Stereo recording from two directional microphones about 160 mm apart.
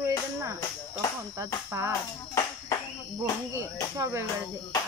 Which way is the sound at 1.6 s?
15° right (ahead or behind).